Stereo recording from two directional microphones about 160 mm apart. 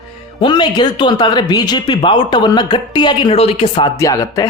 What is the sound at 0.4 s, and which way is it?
Speech, 30° left (ahead or behind).